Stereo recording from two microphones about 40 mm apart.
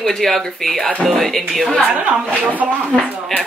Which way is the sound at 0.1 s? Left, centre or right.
Centre.